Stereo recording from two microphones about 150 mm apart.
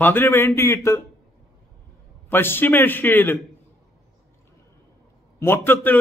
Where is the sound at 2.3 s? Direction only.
15° left (ahead or behind).